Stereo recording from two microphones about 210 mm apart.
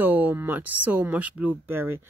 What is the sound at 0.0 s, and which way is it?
Speech, 10° right (ahead or behind).